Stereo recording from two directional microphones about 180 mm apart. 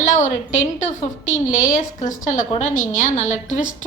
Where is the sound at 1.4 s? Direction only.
45° left (ahead or behind).